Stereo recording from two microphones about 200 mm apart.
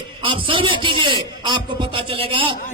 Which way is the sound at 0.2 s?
25° right (ahead or behind).